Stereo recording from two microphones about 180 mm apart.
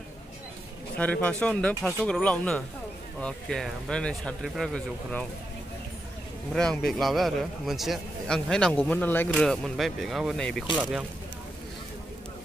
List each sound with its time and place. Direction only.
0.9 s a man's voice: 10° left (ahead or behind)
6.5 s a man's voice: 5° left (ahead or behind)
10.8 s speech: 5° right (ahead or behind)